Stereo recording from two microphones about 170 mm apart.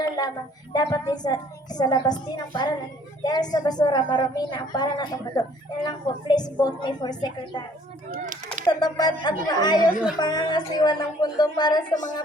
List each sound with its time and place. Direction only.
0.7 s a woman's voice: 25° left (ahead or behind)
8.6 s a woman's voice: 25° left (ahead or behind)